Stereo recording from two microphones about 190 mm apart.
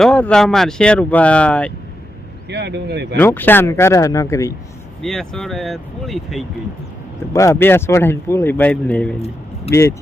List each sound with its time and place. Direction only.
0.0 s speech: 5° left (ahead or behind)
2.5 s speech: 65° right (ahead or behind)
3.2 s speech: 10° left (ahead or behind)
5.0 s speech: centre (ahead or behind)
7.3 s speech: 15° left (ahead or behind)